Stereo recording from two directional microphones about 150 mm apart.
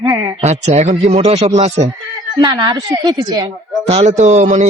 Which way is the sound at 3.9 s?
45° right (ahead or behind).